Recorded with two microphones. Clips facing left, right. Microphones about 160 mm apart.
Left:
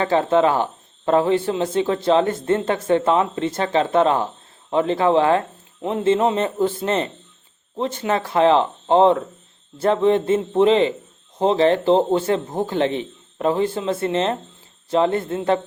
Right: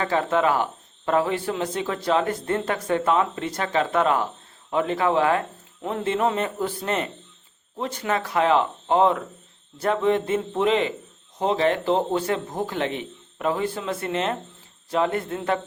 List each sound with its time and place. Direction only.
0.0 s speech: 30° left (ahead or behind)